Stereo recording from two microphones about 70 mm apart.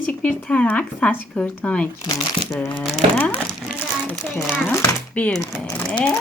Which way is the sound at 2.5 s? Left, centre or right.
Centre.